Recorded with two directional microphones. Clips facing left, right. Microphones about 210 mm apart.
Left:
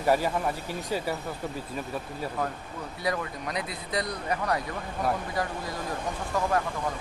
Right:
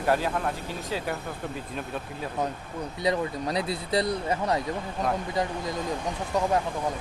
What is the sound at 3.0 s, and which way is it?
Speech, 25° right (ahead or behind).